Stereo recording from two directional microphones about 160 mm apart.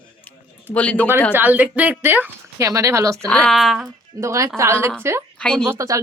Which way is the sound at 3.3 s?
5° left (ahead or behind).